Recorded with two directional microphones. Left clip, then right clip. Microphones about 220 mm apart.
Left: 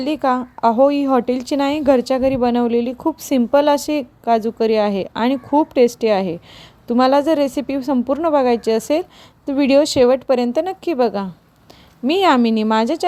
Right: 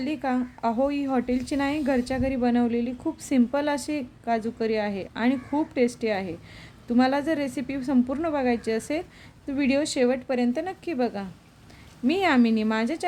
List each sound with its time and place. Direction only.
0.0 s a woman's voice: 30° left (ahead or behind)